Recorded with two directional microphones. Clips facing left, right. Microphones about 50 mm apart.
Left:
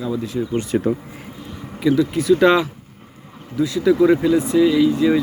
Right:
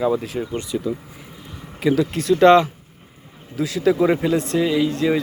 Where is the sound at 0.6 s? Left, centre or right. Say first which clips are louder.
Left 5 dB; left.